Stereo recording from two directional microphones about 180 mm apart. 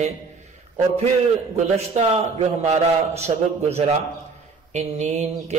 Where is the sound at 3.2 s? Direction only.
35° right (ahead or behind).